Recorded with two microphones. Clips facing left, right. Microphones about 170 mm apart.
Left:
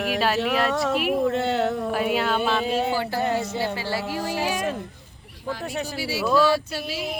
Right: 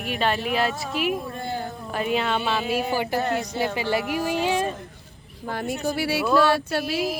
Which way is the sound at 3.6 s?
20° right (ahead or behind).